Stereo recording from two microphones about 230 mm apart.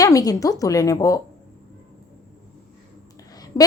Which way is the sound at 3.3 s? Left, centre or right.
Centre.